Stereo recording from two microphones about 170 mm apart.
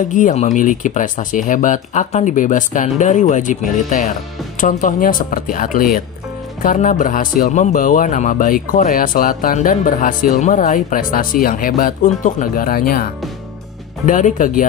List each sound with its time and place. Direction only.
0.1 s speech: 45° left (ahead or behind)